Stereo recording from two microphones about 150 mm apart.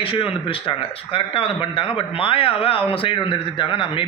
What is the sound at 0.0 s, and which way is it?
Speech, 35° left (ahead or behind).